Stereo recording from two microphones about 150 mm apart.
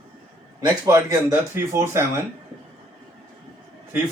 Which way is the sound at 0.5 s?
25° right (ahead or behind).